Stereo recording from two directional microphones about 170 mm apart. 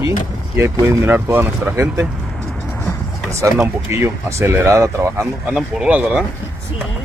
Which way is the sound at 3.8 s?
15° right (ahead or behind).